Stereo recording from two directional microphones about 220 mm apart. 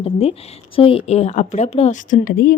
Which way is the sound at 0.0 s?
25° left (ahead or behind).